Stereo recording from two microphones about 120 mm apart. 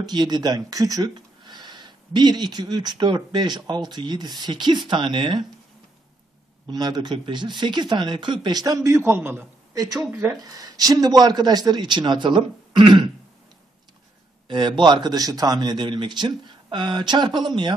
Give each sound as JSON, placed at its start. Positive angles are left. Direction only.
{"t": 0.0, "sound": "a man's voice", "side_deg": -35}
{"t": 6.7, "sound": "a man's voice", "side_deg": -35}
{"t": 9.8, "sound": "a man's voice", "side_deg": -30}
{"t": 14.5, "sound": "a man's voice", "side_deg": -40}